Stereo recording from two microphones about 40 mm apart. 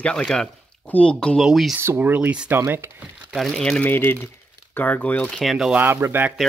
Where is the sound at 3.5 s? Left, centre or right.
Left.